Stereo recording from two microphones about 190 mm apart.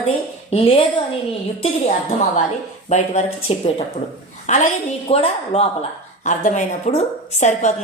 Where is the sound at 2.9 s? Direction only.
40° left (ahead or behind).